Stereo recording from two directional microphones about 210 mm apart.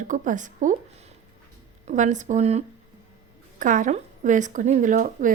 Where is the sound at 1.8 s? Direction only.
35° right (ahead or behind).